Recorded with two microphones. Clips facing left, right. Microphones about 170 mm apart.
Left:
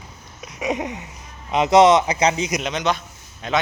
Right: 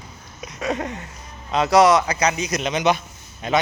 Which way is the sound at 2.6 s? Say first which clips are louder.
Right 3 dB; 5° right (ahead or behind).